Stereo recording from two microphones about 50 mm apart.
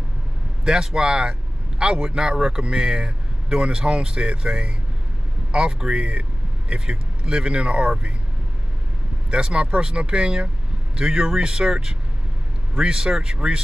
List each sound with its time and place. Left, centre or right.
0.7 s a man's voice: centre
9.3 s a man's voice: centre